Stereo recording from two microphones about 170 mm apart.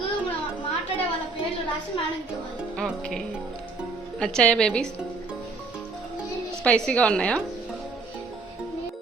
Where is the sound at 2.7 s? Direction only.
Centre (ahead or behind).